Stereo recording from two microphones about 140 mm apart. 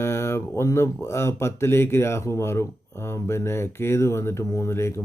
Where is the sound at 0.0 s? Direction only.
20° left (ahead or behind).